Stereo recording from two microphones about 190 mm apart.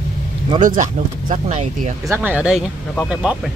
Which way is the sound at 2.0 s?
10° right (ahead or behind).